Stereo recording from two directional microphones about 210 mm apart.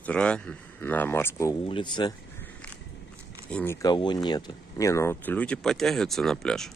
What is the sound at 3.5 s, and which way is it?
Speech, 10° left (ahead or behind).